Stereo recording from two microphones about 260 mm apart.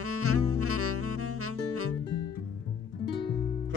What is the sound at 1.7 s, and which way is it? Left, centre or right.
Music, right.